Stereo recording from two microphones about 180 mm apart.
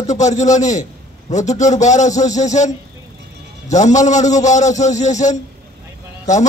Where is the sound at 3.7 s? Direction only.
40° left (ahead or behind).